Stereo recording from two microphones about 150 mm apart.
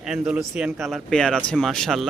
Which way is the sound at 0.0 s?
5° right (ahead or behind).